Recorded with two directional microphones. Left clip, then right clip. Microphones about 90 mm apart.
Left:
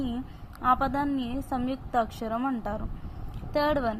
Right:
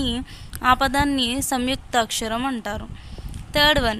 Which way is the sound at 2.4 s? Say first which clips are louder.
Right 5 dB; 40° right (ahead or behind).